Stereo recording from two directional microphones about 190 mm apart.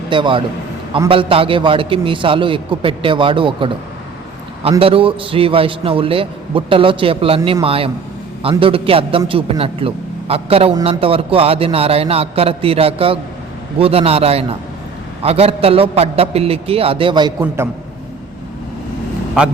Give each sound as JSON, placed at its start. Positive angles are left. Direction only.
{"t": 0.1, "sound": "a man's voice", "side_deg": -25}
{"t": 4.8, "sound": "a man's voice", "side_deg": -30}